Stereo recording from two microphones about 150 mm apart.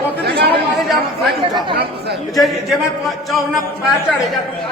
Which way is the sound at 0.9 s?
Centre (ahead or behind).